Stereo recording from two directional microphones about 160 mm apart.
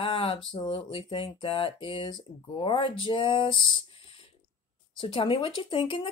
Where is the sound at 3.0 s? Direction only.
30° left (ahead or behind).